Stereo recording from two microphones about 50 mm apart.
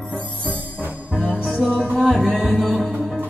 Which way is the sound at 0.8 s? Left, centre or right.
Right.